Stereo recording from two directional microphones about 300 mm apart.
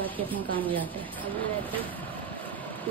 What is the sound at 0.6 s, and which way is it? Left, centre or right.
Speech, centre.